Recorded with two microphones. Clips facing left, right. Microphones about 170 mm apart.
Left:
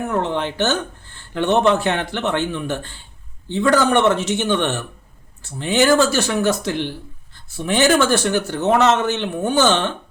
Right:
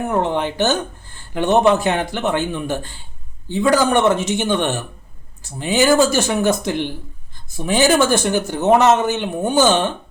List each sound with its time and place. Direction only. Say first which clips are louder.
0.1 s speech: right 3 dB; 15° right (ahead or behind)